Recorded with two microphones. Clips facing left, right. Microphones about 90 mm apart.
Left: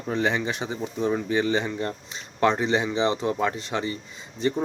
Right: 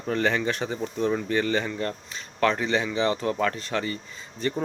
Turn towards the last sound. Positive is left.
turn(degrees=20)  # may be behind; listen again after turning